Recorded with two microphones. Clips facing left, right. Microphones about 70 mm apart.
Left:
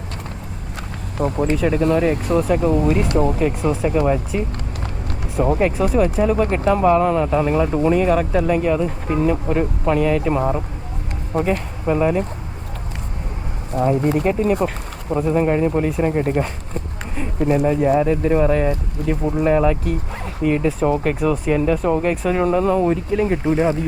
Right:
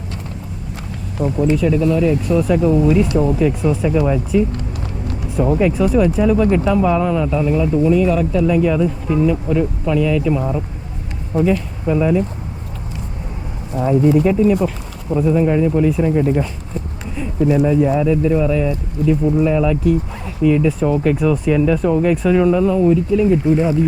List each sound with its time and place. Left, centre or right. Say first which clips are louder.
1.2 s speech: right 2 dB; left
13.7 s speech: right 4 dB; left